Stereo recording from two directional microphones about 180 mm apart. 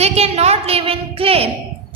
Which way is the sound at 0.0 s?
35° right (ahead or behind).